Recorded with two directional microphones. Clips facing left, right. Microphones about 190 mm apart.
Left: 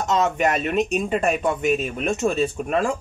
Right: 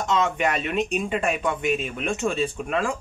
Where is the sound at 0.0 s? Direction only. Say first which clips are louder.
Left 2 dB; 40° left (ahead or behind).